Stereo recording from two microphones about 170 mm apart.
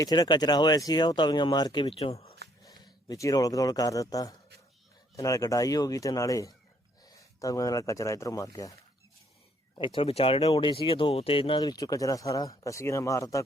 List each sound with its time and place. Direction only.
0.0 s speech: 25° left (ahead or behind)
2.6 s speech: 20° left (ahead or behind)
9.7 s speech: 30° left (ahead or behind)